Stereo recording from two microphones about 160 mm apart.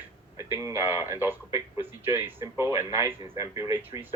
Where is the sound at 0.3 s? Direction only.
15° right (ahead or behind).